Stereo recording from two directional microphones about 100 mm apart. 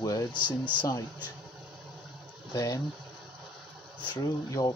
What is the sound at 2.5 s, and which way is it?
Speech, 40° left (ahead or behind).